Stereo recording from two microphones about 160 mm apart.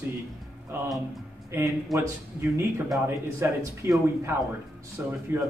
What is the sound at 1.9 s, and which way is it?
Speech, centre (ahead or behind).